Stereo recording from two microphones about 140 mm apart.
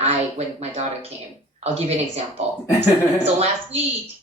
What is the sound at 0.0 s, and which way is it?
Speech, 50° right (ahead or behind).